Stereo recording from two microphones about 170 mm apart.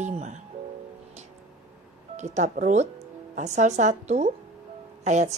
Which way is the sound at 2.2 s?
45° right (ahead or behind).